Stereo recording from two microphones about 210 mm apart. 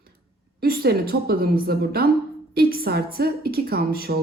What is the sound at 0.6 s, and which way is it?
A woman's voice, 45° right (ahead or behind).